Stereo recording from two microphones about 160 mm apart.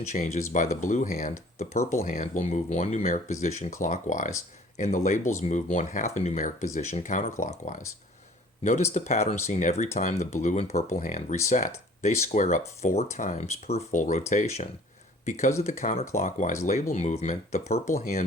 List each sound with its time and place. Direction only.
0.1 s speech: 45° left (ahead or behind)
17.9 s speech: 60° left (ahead or behind)